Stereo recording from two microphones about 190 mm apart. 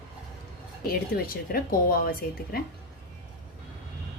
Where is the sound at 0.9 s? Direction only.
50° left (ahead or behind).